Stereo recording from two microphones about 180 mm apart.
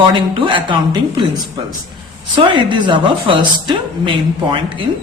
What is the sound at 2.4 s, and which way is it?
A man's voice, 25° right (ahead or behind).